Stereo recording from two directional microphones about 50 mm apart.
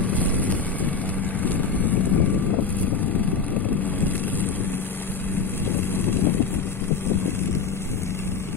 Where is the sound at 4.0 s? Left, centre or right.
Left.